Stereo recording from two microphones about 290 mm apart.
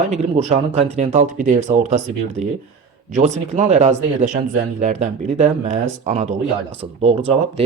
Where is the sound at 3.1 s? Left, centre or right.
Right.